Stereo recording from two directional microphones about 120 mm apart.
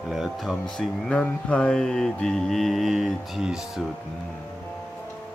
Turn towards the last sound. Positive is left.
turn(degrees=-5)  # may be behind; listen again after turning